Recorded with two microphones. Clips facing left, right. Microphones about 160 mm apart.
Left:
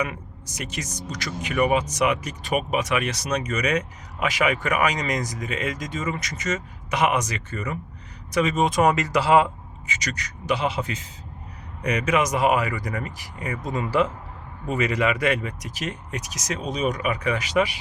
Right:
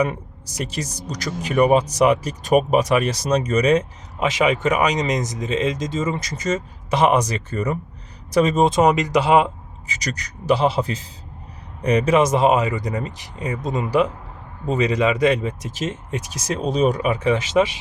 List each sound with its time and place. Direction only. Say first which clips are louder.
0.0 s speech: right 7 dB; 35° right (ahead or behind)
8.8 s speech: right 4 dB; 20° right (ahead or behind)
9.8 s speech: right 2 dB; 35° right (ahead or behind)